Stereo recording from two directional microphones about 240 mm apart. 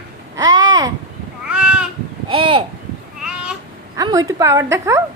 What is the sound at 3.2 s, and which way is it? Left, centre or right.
Babbling, centre.